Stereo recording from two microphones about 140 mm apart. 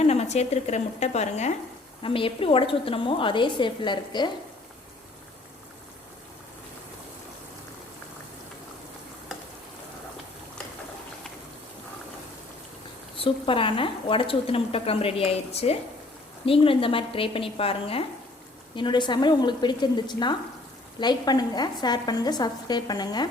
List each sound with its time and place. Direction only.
0.0 s a woman's voice: 50° left (ahead or behind)
2.0 s speech: 40° left (ahead or behind)
13.1 s a woman's voice: 40° left (ahead or behind)